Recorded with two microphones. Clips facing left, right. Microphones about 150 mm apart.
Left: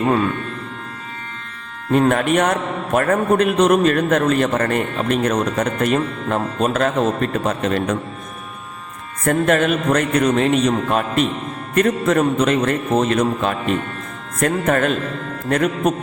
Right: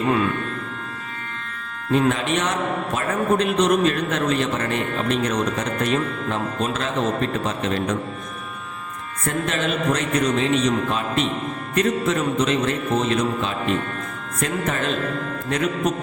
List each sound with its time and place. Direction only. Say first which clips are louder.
1.9 s a man's voice: left 4 dB; 50° left (ahead or behind)
9.2 s a man's voice: left 8 dB; 55° left (ahead or behind)